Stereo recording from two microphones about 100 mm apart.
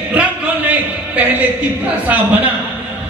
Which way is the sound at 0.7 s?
15° right (ahead or behind).